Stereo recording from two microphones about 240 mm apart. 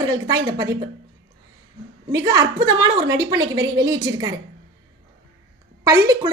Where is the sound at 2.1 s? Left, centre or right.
Centre.